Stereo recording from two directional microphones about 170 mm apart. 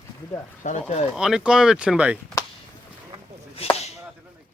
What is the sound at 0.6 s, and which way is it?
Speech, 45° left (ahead or behind).